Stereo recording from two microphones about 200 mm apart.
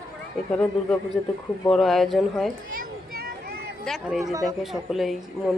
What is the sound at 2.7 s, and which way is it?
Children playing, 45° right (ahead or behind).